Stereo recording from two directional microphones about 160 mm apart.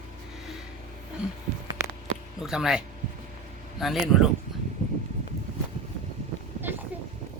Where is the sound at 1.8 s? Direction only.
15° right (ahead or behind).